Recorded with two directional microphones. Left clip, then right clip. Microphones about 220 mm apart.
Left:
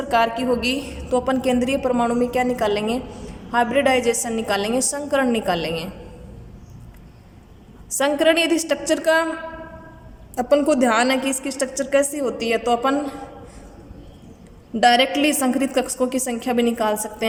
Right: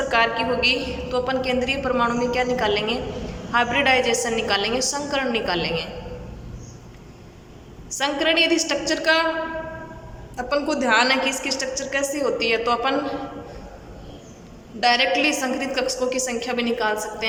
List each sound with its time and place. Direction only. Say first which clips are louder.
0.1 s a woman's voice: left 3 dB; 30° left (ahead or behind)
7.9 s a woman's voice: left 3 dB; 30° left (ahead or behind)
10.3 s a woman's voice: left 6 dB; 35° left (ahead or behind)
14.8 s a woman's voice: left 3 dB; 35° left (ahead or behind)